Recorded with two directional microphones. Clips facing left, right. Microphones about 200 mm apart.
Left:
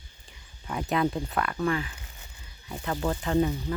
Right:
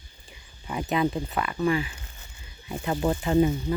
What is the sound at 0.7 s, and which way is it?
Speech, 5° right (ahead or behind).